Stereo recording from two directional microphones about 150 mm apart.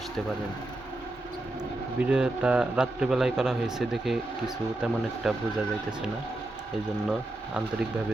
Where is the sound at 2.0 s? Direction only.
5° right (ahead or behind).